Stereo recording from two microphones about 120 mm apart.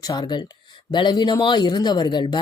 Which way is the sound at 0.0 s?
35° left (ahead or behind).